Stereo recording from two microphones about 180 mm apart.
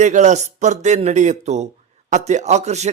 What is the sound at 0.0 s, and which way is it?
A man's voice, 40° right (ahead or behind).